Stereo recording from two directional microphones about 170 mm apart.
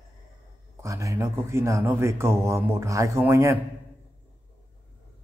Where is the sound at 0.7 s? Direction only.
15° right (ahead or behind).